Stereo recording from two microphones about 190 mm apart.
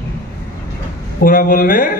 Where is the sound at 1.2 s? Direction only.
45° left (ahead or behind).